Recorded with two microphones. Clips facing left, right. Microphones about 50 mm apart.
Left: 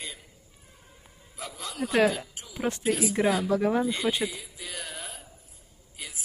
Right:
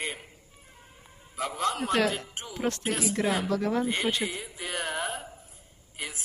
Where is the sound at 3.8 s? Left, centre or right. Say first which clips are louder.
Even; right.